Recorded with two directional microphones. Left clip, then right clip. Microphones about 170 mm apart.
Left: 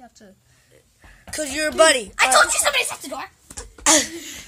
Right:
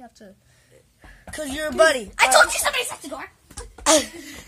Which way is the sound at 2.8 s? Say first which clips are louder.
Left 4 dB; 45° left (ahead or behind).